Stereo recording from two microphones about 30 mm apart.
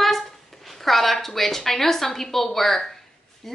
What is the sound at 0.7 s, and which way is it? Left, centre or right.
A woman's voice, centre.